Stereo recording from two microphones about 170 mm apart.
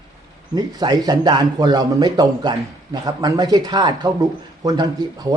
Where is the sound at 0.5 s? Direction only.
25° right (ahead or behind).